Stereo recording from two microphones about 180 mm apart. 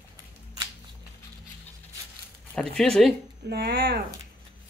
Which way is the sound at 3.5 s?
60° right (ahead or behind).